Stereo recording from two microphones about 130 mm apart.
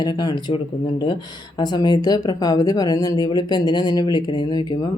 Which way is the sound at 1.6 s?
30° left (ahead or behind).